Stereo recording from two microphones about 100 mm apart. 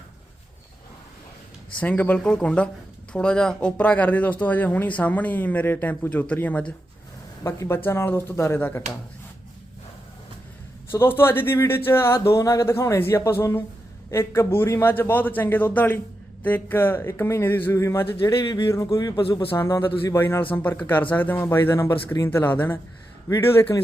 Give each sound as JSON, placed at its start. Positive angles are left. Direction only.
{"t": 1.8, "sound": "speech", "side_deg": 15}
{"t": 7.4, "sound": "a man's voice", "side_deg": 25}
{"t": 10.9, "sound": "a man's voice", "side_deg": 25}